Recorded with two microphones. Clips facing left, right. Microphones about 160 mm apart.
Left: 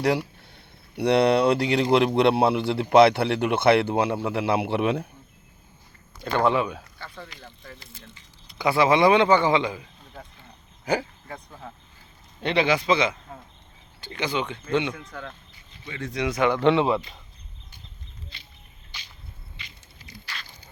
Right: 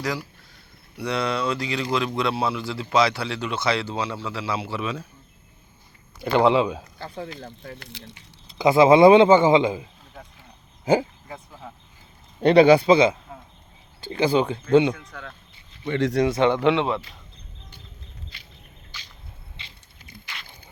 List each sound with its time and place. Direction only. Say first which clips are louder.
0.0 s speech: left 6 dB; 65° left (ahead or behind)
6.3 s speech: right 4 dB; 15° right (ahead or behind)
7.2 s speech: right 8 dB; 50° right (ahead or behind)
8.5 s a man's voice: right 6 dB; 20° right (ahead or behind)
10.2 s a sound: left 1 dB; 5° left (ahead or behind)
11.3 s speech: even; 5° right (ahead or behind)
12.4 s speech: right 9 dB; 40° right (ahead or behind)
14.9 s speech: left 2 dB; 5° left (ahead or behind)
15.8 s speech: right 12 dB; 75° right (ahead or behind)
16.1 s a man's voice: right 2 dB; 30° right (ahead or behind)
16.6 s speech: left 1 dB; centre (ahead or behind)
18.3 s a sound: even; 25° left (ahead or behind)
19.6 s a sound: left 1 dB; 25° right (ahead or behind)
20.2 s biting: left 1 dB; 20° right (ahead or behind)